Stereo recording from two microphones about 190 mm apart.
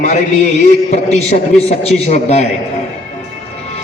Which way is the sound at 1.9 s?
35° left (ahead or behind).